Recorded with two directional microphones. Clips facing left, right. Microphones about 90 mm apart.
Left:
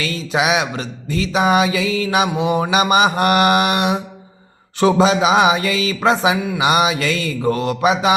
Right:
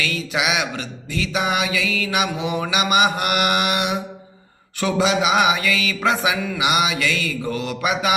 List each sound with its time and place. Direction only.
0.0 s mantra: 35° left (ahead or behind)